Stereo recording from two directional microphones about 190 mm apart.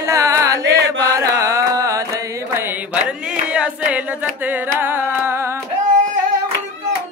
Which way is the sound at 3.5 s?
5° right (ahead or behind).